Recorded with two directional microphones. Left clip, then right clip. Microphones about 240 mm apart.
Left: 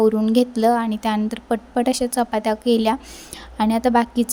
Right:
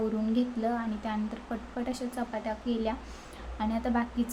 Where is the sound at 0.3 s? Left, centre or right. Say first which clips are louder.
Left 14 dB; left.